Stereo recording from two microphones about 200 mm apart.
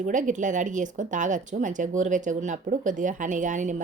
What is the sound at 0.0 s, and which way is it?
Speech, 40° right (ahead or behind).